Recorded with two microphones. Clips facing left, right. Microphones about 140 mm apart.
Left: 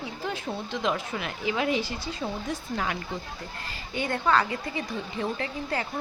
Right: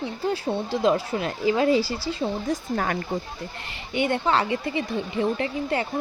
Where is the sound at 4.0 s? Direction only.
20° right (ahead or behind).